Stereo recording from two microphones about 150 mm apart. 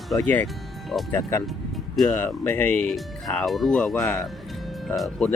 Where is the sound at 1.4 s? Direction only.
Centre (ahead or behind).